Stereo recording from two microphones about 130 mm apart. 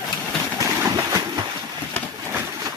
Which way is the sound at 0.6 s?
25° right (ahead or behind).